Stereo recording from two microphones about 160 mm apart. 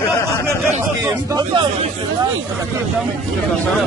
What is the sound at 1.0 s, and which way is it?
Speech, 20° right (ahead or behind).